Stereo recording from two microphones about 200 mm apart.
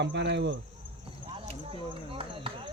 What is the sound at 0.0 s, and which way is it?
Speech, 60° right (ahead or behind).